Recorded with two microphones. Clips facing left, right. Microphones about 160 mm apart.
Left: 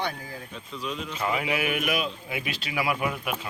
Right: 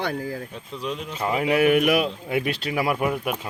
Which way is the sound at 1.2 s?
40° right (ahead or behind).